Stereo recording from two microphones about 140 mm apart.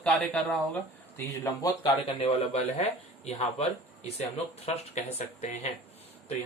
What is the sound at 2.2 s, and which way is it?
Speech, 50° left (ahead or behind).